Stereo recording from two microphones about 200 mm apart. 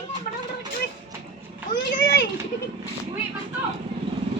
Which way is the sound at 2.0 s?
60° left (ahead or behind).